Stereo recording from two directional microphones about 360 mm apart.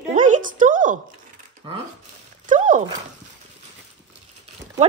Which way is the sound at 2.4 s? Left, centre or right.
Right.